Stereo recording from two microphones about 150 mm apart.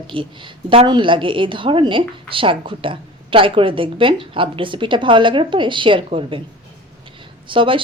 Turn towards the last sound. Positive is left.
turn(degrees=-35)  # may be behind; listen again after turning